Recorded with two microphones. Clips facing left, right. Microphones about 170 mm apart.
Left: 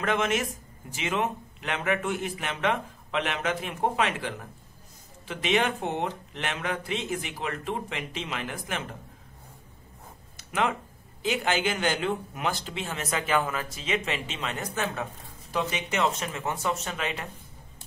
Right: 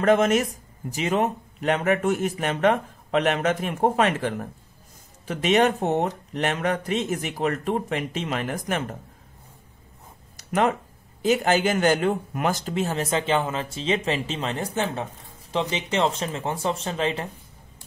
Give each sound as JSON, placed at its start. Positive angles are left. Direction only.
{"t": 0.0, "sound": "speech", "side_deg": -40}
{"t": 10.3, "sound": "a sound", "side_deg": -40}
{"t": 11.2, "sound": "speech", "side_deg": -40}